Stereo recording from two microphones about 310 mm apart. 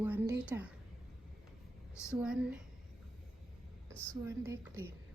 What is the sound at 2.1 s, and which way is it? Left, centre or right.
Speech, centre.